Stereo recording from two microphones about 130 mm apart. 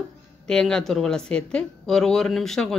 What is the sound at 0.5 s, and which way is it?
Speech, 5° left (ahead or behind).